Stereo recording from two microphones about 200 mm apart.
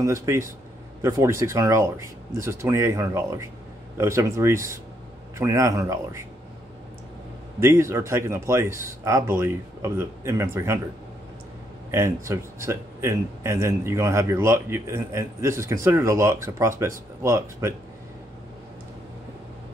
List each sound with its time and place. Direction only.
0.0 s a man's voice: 15° right (ahead or behind)
7.6 s a man's voice: 15° right (ahead or behind)
11.9 s a man's voice: 15° right (ahead or behind)